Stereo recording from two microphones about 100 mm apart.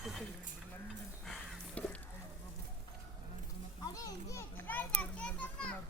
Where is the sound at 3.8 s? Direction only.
40° left (ahead or behind).